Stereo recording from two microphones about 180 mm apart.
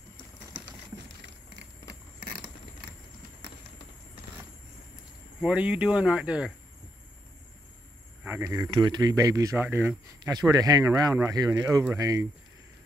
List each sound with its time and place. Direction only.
5.4 s speech: 5° right (ahead or behind)
8.2 s speech: 15° right (ahead or behind)